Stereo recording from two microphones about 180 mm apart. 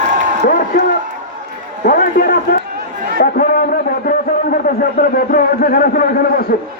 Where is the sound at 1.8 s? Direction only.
50° left (ahead or behind).